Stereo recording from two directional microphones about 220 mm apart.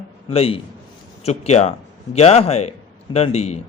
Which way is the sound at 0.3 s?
25° left (ahead or behind).